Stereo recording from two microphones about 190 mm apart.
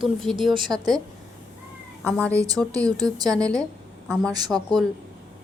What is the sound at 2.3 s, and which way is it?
Speech, 20° right (ahead or behind).